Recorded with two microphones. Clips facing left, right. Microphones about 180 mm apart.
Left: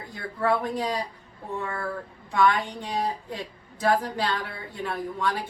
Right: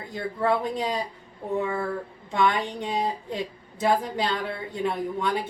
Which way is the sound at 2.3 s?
20° right (ahead or behind).